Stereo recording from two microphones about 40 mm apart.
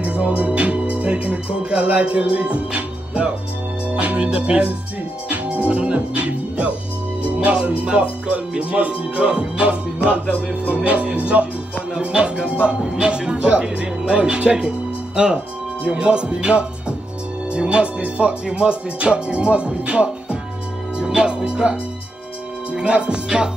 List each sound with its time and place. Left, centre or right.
0.0 s music: right
1.6 s speech: right
3.9 s speech: right
4.2 s speech: right
5.3 s music: right
7.4 s speech: right
11.9 s speech: right
12.8 s music: right
15.1 s speech: right
22.8 s speech: right